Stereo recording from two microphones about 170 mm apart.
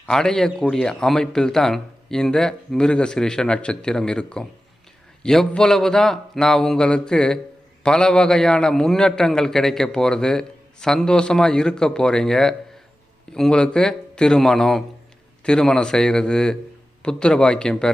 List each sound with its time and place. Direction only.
0.0 s a man's voice: 5° left (ahead or behind)